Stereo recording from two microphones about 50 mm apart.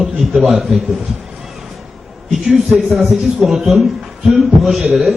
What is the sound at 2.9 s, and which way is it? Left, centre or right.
A man's voice, centre.